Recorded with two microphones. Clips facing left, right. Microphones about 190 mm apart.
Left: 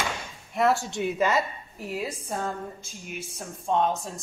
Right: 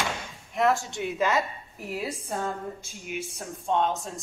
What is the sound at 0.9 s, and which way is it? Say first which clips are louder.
Speech: left 2 dB; 15° left (ahead or behind).